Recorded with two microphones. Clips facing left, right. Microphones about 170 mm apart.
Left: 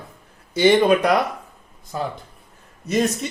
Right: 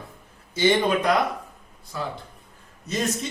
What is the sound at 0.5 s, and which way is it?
Speech, 75° left (ahead or behind).